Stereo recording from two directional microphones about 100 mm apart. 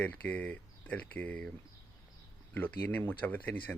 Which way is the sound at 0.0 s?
15° left (ahead or behind).